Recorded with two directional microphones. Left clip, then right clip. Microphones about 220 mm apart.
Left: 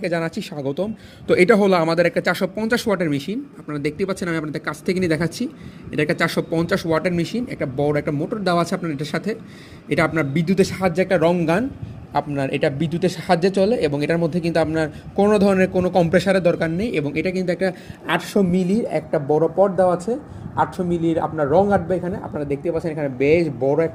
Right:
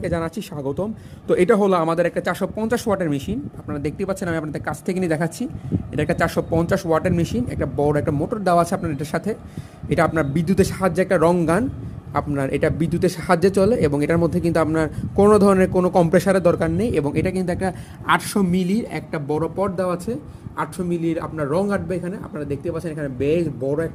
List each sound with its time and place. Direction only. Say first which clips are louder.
0.0 s a man's voice: left 2 dB; 5° right (ahead or behind); by 20.0 s 25° right (ahead or behind)
21.3 s a man's voice: left 7 dB; 20° right (ahead or behind)